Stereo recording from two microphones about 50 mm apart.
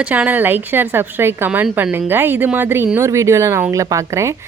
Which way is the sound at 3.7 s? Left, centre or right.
Right.